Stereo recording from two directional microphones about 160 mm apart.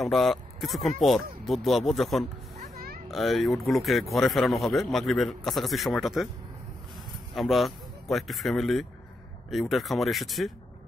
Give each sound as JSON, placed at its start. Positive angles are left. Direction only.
{"t": 0.0, "sound": "speech", "side_deg": 0}
{"t": 2.6, "sound": "oink", "side_deg": -70}
{"t": 3.1, "sound": "speech", "side_deg": 0}
{"t": 7.3, "sound": "speech", "side_deg": 0}